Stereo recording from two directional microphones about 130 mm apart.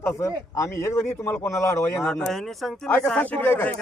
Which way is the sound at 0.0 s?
25° left (ahead or behind).